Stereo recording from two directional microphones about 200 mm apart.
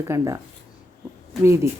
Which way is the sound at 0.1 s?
15° right (ahead or behind).